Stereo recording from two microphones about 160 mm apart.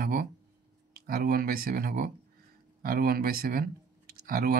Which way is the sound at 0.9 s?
65° right (ahead or behind).